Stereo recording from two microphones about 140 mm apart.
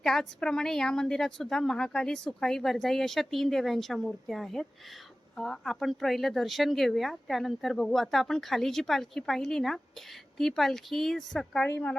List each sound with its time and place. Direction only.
0.0 s a woman's voice: 5° left (ahead or behind)